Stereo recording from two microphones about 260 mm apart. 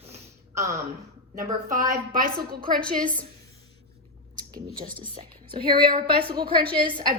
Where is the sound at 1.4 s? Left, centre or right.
Right.